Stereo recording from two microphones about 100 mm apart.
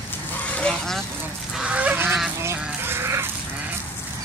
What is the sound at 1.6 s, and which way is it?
Goose, 10° right (ahead or behind).